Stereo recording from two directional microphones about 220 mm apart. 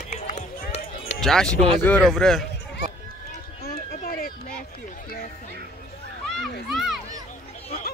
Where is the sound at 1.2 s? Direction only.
Centre (ahead or behind).